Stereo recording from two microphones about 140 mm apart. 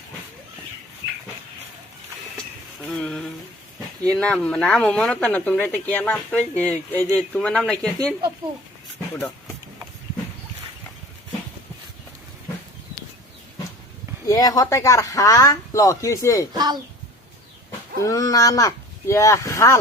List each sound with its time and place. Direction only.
2.8 s a sound: 5° left (ahead or behind)
4.0 s speech: 5° left (ahead or behind)
14.3 s speech: 25° left (ahead or behind)
17.7 s speech: 25° left (ahead or behind)